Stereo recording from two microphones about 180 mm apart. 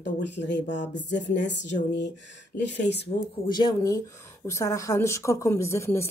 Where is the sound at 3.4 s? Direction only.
25° left (ahead or behind).